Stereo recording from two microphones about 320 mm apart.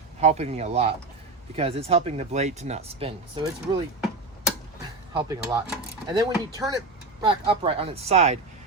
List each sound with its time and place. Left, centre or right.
0.2 s speech: centre
5.1 s speech: centre